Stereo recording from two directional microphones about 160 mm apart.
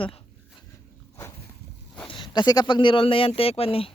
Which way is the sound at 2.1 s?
30° left (ahead or behind).